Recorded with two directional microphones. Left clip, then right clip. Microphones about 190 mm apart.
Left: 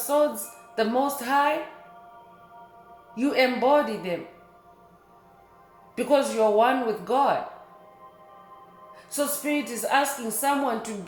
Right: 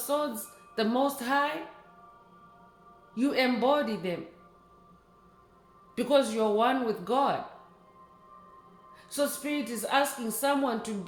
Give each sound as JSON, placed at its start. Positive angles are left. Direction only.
{"t": 0.1, "sound": "speech", "side_deg": -35}
{"t": 3.2, "sound": "speech", "side_deg": -30}
{"t": 6.0, "sound": "speech", "side_deg": -35}
{"t": 9.0, "sound": "speech", "side_deg": -35}